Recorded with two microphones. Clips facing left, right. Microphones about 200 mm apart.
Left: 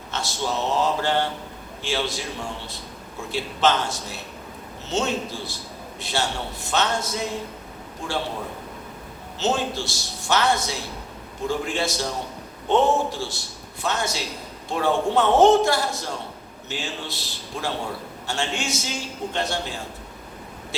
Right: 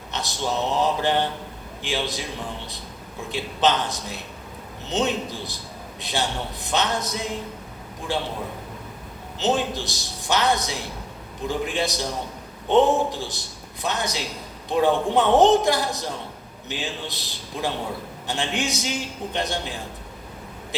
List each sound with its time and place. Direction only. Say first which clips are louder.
0.1 s a man's voice: even; 20° right (ahead or behind)
3.3 s a man's voice: even; 20° right (ahead or behind)
9.4 s a man's voice: right 1 dB; 20° right (ahead or behind)